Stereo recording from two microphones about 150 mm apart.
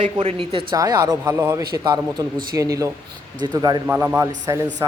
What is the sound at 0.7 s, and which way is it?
Speech, 25° right (ahead or behind).